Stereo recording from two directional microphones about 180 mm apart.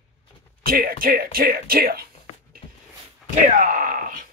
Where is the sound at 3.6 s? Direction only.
50° right (ahead or behind).